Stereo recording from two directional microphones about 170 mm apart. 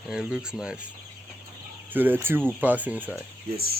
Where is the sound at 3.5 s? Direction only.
60° right (ahead or behind).